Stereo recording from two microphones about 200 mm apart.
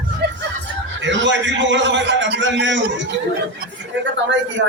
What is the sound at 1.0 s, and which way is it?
A man's voice, 65° right (ahead or behind).